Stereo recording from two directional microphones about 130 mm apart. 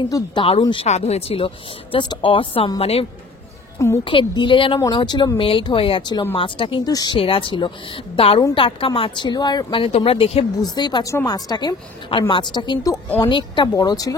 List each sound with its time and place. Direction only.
0.1 s speech: 35° left (ahead or behind)
0.8 s a woman's voice: 55° left (ahead or behind)
3.7 s a woman's voice: 20° left (ahead or behind)
4.0 s speech: 40° left (ahead or behind)
6.9 s a woman's voice: 30° left (ahead or behind)
7.2 s speech: 45° left (ahead or behind)
10.6 s speech: 35° left (ahead or behind)